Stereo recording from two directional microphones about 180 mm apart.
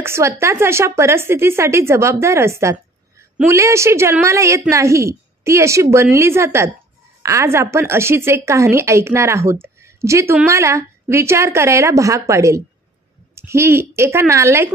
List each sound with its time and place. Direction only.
0.0 s a woman's voice: 15° right (ahead or behind)